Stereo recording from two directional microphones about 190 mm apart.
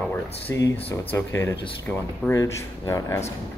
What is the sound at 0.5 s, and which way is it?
Speech, 15° left (ahead or behind).